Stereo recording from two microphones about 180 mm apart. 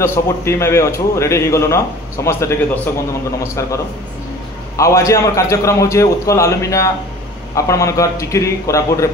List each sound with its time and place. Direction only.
0.0 s a man's voice: 15° left (ahead or behind)